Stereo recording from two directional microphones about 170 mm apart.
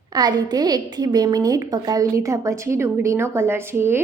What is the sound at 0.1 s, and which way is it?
A woman's voice, 25° right (ahead or behind).